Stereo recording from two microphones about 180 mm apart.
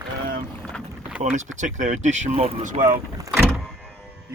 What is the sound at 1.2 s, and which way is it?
Speech, 40° right (ahead or behind).